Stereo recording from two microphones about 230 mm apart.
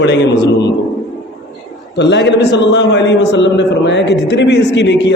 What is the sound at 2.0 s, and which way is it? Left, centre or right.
A man's voice, left.